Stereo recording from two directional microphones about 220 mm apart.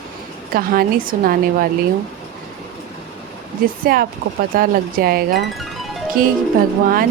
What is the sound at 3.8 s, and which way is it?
A woman's voice, 40° right (ahead or behind).